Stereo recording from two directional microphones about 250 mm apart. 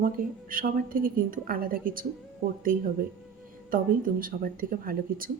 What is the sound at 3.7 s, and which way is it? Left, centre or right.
A woman's voice, right.